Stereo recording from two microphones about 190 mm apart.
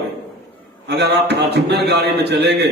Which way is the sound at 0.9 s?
60° right (ahead or behind).